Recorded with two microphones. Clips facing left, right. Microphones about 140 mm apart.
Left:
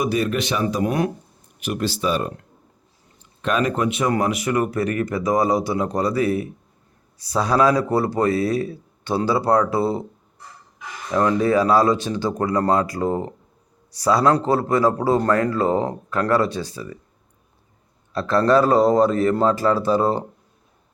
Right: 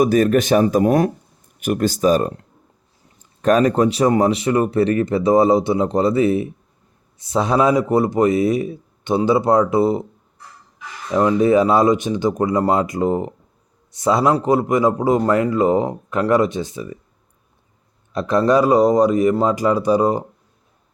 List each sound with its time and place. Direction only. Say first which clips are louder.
0.0 s speech: right 7 dB; 45° right (ahead or behind)
3.4 s speech: right 6 dB; 40° right (ahead or behind); by 10.1 s 20° right (ahead or behind)
11.1 s speech: right 4 dB; 15° right (ahead or behind)
18.1 s speech: right 1 dB; 15° right (ahead or behind)